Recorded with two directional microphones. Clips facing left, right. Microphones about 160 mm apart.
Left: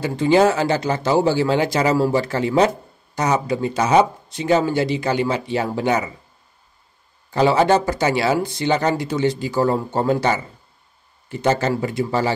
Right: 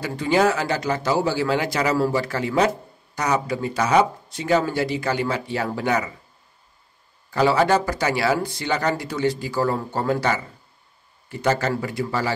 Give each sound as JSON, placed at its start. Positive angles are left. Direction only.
{"t": 0.0, "sound": "speech", "side_deg": 25}
{"t": 7.2, "sound": "a man's voice", "side_deg": 20}